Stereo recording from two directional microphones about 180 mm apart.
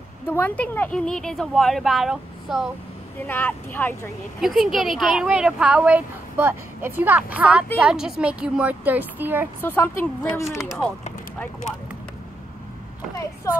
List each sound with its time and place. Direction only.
0.3 s speech: 10° left (ahead or behind)
3.3 s speech: 10° left (ahead or behind)
4.4 s a woman's voice: centre (ahead or behind)
9.6 s speech: 10° left (ahead or behind)
13.5 s speech: 15° left (ahead or behind)